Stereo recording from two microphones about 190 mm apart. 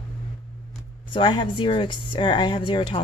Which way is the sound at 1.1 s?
25° left (ahead or behind).